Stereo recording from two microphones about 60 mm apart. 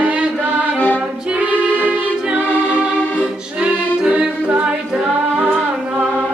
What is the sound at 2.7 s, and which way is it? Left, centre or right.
Music, centre.